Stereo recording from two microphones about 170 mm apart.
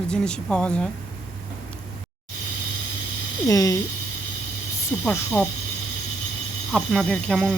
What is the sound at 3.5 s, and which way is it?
Speech, 20° left (ahead or behind).